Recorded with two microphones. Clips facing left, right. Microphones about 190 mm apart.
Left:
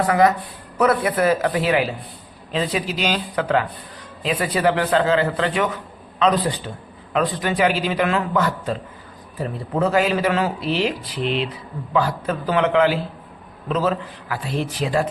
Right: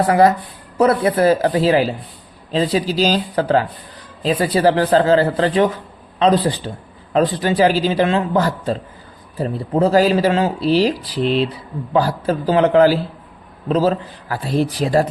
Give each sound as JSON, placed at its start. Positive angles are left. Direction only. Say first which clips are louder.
{"t": 0.1, "sound": "speech", "louder": "right 3 dB", "side_deg": -30}